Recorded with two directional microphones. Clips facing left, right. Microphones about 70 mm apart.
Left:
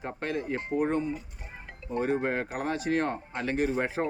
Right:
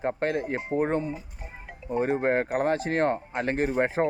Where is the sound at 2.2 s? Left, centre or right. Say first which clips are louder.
Right 6 dB; right.